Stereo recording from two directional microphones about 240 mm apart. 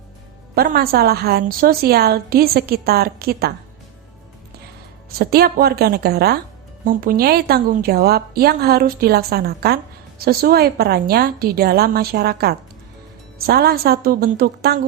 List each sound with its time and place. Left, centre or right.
0.5 s a woman's voice: right
5.1 s a woman's voice: right